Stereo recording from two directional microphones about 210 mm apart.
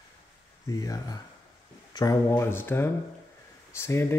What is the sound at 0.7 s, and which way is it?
Speech, 15° left (ahead or behind).